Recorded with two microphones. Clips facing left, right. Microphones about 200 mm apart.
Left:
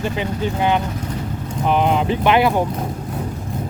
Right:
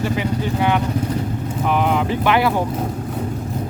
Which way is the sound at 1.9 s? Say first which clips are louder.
Left 1 dB; 20° left (ahead or behind).